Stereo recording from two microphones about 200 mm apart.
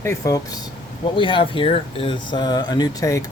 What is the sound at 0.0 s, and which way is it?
Speech, 15° left (ahead or behind).